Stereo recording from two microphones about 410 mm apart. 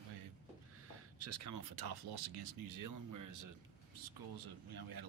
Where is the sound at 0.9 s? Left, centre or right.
Right.